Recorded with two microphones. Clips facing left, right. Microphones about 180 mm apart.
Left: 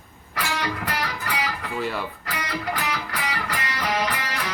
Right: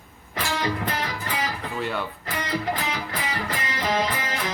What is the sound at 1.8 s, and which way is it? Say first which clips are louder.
Speech: even; centre (ahead or behind).